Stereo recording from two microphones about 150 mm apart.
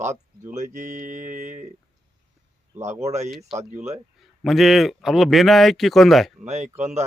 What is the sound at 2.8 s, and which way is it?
Mantra, 50° right (ahead or behind).